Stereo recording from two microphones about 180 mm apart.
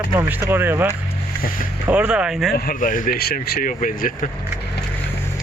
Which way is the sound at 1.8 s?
10° right (ahead or behind).